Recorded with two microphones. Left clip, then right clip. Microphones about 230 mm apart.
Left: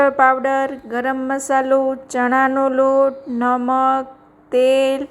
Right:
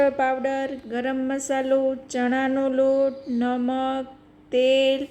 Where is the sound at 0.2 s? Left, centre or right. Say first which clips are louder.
Left 9 dB; centre.